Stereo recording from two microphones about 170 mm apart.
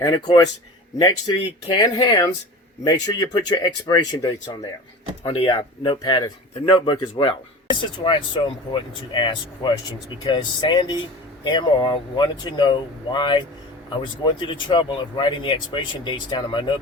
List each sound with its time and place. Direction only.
0.0 s speech: 25° left (ahead or behind)